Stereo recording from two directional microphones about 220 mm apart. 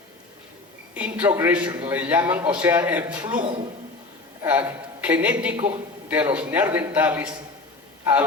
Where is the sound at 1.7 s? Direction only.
20° right (ahead or behind).